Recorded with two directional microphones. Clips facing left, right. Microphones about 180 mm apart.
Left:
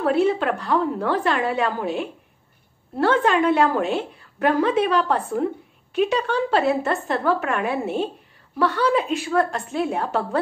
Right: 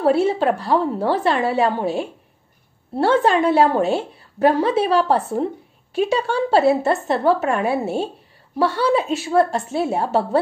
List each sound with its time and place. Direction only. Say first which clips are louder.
0.0 s a woman's voice: right 3 dB; 30° right (ahead or behind)